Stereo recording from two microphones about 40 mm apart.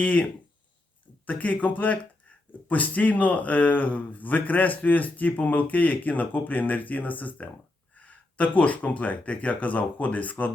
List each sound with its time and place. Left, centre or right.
0.0 s speech: left
1.3 s speech: left